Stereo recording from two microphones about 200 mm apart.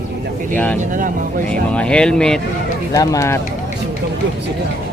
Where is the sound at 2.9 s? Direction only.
15° left (ahead or behind).